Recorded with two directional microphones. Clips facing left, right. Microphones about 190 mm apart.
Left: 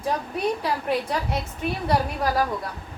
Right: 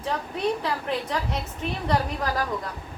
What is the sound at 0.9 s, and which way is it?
Speech, 10° left (ahead or behind).